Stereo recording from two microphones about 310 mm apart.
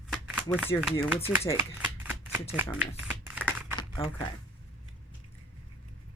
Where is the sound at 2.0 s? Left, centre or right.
Centre.